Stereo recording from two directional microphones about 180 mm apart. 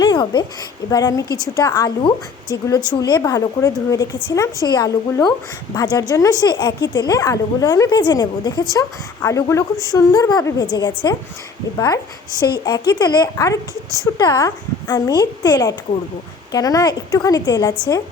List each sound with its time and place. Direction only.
0.0 s a sound: 25° left (ahead or behind)
0.9 s speech: 20° left (ahead or behind)
12.3 s speech: 15° right (ahead or behind)
12.6 s speech: 20° left (ahead or behind)